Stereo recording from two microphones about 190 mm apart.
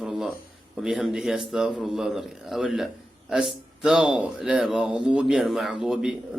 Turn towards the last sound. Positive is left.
turn(degrees=-5)  # may be behind; listen again after turning